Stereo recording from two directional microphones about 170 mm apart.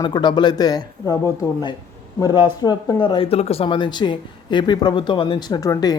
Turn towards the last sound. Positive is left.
turn(degrees=20)  # may be behind; listen again after turning